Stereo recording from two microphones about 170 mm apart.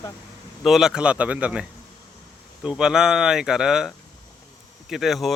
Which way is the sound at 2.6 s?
5° right (ahead or behind).